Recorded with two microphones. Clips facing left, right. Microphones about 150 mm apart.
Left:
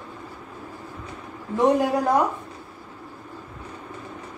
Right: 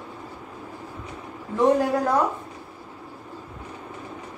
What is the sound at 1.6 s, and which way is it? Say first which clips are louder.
Speech: even; 15° left (ahead or behind).